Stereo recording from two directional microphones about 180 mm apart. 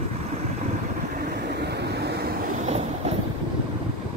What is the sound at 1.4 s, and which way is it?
Vehicle, 65° right (ahead or behind).